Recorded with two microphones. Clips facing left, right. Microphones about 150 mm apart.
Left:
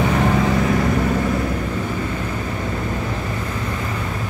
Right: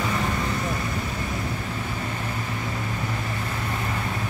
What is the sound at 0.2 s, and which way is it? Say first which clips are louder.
Vehicle: left 9 dB; 85° left.